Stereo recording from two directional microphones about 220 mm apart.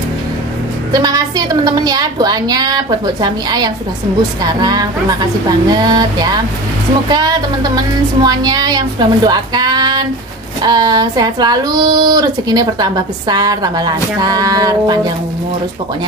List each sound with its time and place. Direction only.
0.9 s speech: 20° right (ahead or behind)